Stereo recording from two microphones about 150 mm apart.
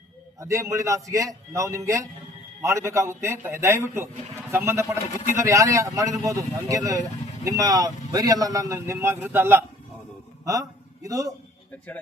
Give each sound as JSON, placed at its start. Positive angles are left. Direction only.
{"t": 0.3, "sound": "a man's voice", "side_deg": -20}